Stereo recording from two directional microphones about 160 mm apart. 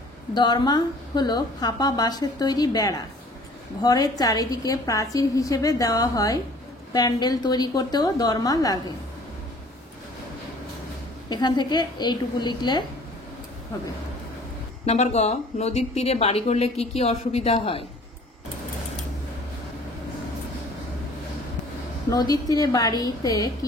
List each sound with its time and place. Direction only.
0.3 s a woman's voice: 25° left (ahead or behind)
11.2 s a woman's voice: 25° left (ahead or behind)
14.9 s speech: 45° left (ahead or behind)
22.1 s a woman's voice: 25° left (ahead or behind)